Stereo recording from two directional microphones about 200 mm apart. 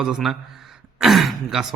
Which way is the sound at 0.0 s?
Centre (ahead or behind).